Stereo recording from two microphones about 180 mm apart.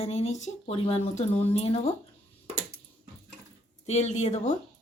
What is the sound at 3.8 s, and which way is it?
Speech, 40° left (ahead or behind).